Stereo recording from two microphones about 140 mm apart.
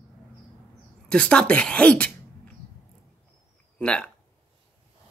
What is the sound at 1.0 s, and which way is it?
Speech, 5° left (ahead or behind).